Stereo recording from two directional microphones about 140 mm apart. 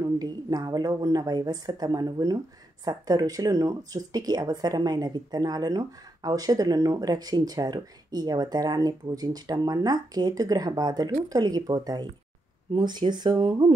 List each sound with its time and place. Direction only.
0.0 s speech: 30° right (ahead or behind)